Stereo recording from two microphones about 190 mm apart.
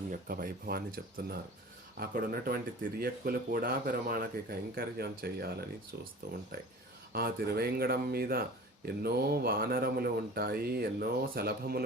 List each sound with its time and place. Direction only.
0.1 s speech: 50° right (ahead or behind)